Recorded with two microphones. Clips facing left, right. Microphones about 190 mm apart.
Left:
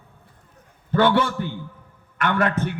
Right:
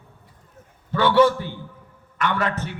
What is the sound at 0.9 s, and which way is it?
Speech, 50° left (ahead or behind).